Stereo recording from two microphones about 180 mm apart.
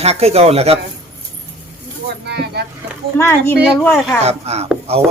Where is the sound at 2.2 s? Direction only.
65° right (ahead or behind).